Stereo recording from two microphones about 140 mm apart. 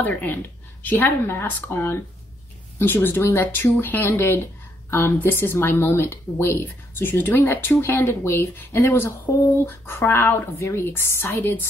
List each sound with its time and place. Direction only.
0.0 s a woman's voice: 15° left (ahead or behind)